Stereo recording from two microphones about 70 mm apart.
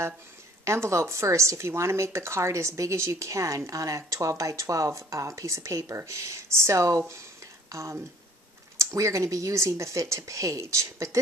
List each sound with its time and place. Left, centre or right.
0.7 s speech: right